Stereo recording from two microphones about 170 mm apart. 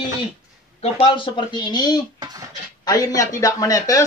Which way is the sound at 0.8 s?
30° left (ahead or behind).